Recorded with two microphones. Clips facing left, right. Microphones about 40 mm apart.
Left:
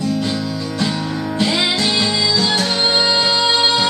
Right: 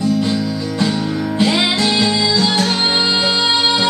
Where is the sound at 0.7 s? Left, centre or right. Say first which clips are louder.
Right 3 dB; centre.